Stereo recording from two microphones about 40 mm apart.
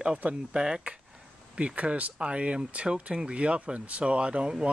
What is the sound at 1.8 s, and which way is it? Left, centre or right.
Speech, right.